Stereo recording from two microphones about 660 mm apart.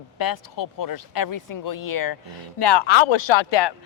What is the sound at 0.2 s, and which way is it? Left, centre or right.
Speech, left.